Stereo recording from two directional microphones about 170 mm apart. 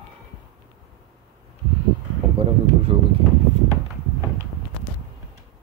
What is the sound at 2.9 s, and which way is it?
Speech, 30° right (ahead or behind).